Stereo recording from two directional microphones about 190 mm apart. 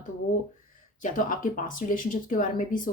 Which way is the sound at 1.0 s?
45° left (ahead or behind).